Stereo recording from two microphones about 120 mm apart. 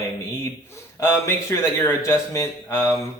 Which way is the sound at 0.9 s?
25° left (ahead or behind).